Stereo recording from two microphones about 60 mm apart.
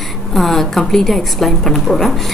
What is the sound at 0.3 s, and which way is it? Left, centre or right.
A woman's voice, centre.